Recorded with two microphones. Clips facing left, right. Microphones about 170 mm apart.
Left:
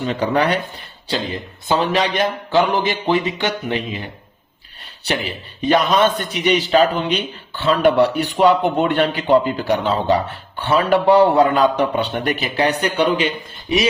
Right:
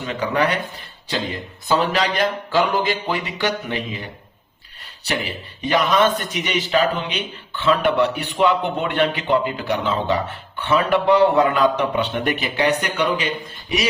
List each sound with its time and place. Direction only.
0.0 s a man's voice: 35° left (ahead or behind)
5.0 s a man's voice: 30° left (ahead or behind)